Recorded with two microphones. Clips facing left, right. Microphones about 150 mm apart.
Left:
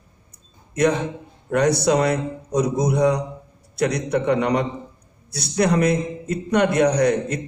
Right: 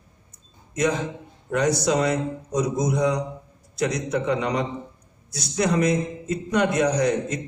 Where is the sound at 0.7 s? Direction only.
65° left (ahead or behind).